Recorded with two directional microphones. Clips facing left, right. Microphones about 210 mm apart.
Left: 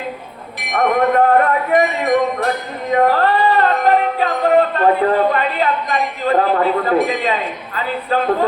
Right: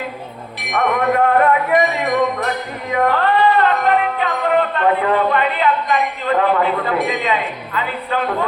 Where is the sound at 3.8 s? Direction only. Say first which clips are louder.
Left 2 dB; 35° left (ahead or behind).